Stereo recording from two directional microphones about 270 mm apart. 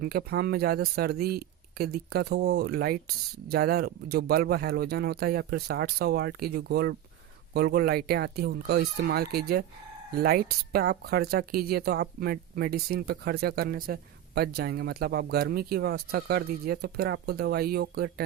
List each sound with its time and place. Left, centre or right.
0.0 s speech: right